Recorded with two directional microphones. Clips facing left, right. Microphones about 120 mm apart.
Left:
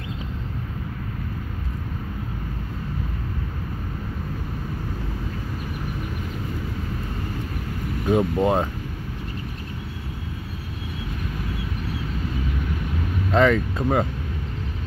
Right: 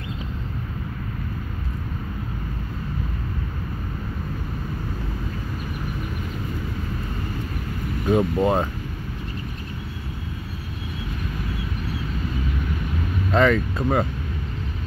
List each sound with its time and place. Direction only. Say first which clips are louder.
8.1 s speech: even; 15° left (ahead or behind)
13.3 s speech: even; 20° left (ahead or behind)